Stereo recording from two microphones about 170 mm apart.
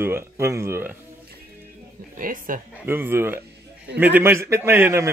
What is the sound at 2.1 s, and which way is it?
Speech, 50° right (ahead or behind).